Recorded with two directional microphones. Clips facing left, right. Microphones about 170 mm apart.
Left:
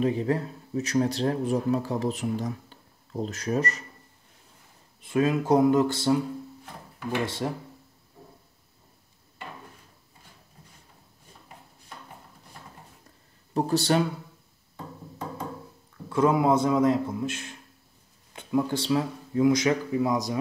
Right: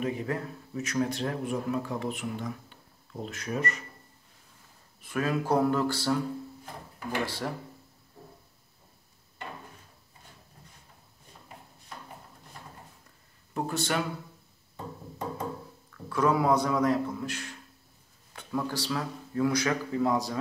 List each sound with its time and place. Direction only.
0.0 s speech: 30° left (ahead or behind)
5.0 s speech: 20° left (ahead or behind)
7.2 s speech: 20° left (ahead or behind)
13.5 s speech: 35° left (ahead or behind)
16.1 s speech: 25° left (ahead or behind)